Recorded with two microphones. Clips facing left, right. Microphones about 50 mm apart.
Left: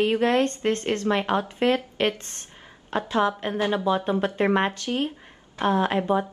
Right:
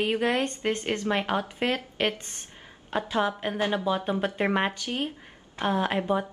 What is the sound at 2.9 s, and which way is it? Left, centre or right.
A woman's voice, centre.